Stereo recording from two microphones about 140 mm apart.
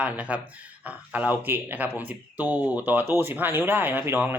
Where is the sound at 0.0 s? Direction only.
10° right (ahead or behind).